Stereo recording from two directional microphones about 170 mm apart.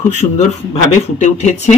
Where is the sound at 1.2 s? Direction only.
45° left (ahead or behind).